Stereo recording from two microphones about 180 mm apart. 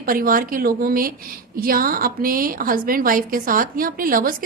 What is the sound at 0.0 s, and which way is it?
A woman's voice, 55° right (ahead or behind).